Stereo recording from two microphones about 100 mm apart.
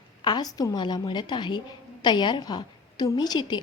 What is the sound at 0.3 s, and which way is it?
A woman's voice, 45° left (ahead or behind).